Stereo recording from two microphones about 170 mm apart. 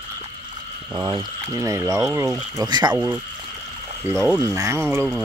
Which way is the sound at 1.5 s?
20° right (ahead or behind).